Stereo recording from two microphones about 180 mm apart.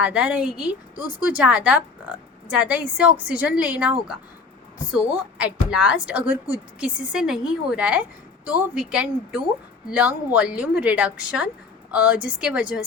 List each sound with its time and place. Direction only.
0.0 s a woman's voice: 5° right (ahead or behind)